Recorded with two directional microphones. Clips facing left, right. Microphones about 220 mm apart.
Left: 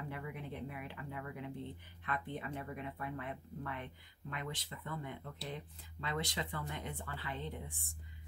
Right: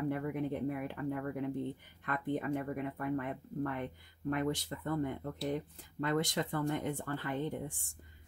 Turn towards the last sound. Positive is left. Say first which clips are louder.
# right 8 dB
turn(degrees=-45)  # may be behind; listen again after turning